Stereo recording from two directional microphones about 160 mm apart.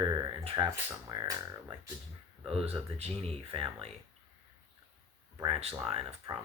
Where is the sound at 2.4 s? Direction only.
35° right (ahead or behind).